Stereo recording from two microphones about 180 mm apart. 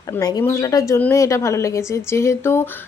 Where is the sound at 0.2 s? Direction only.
20° left (ahead or behind).